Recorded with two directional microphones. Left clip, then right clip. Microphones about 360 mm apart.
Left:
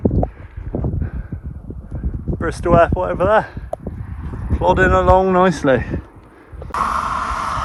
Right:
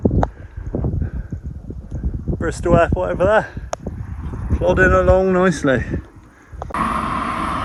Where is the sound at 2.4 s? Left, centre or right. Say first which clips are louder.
Left 2 dB; centre.